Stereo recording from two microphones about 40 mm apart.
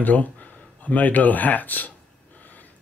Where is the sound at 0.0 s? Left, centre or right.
Left.